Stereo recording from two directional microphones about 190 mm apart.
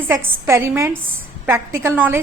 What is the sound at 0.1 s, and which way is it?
A woman's voice, 15° right (ahead or behind).